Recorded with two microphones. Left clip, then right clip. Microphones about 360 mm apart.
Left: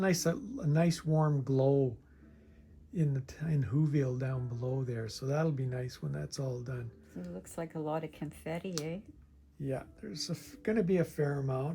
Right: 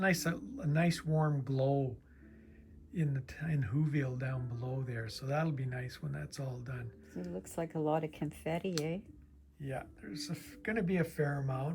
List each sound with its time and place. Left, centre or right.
0.0 s speech: centre
2.9 s speech: centre
7.1 s speech: right
9.6 s speech: centre